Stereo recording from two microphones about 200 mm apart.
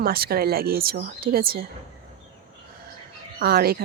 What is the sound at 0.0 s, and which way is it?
Speech, 50° right (ahead or behind).